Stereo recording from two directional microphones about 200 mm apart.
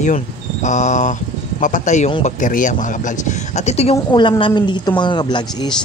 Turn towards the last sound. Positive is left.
turn(degrees=20)  # may be behind; listen again after turning